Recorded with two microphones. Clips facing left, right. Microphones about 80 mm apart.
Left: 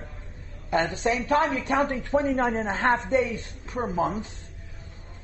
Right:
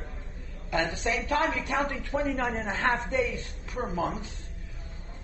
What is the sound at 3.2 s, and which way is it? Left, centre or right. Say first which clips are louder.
Speech: left 2 dB; left.